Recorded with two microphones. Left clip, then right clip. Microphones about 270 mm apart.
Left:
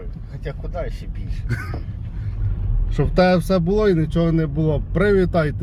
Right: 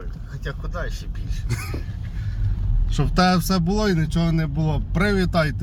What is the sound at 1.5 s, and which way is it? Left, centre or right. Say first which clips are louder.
Speech: left 2 dB; centre.